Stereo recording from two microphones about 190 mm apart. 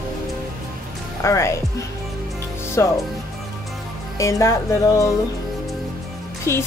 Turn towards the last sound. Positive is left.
turn(degrees=15)  # may be behind; listen again after turning